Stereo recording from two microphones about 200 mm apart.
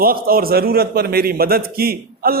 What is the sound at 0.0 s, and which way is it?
A man's voice, 45° right (ahead or behind).